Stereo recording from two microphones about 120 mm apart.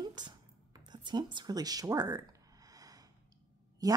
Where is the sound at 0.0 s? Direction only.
35° right (ahead or behind).